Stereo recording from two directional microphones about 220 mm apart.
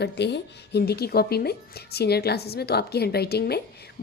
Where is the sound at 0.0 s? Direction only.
50° left (ahead or behind).